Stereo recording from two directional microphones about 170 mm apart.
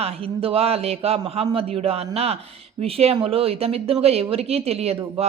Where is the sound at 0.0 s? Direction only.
35° right (ahead or behind).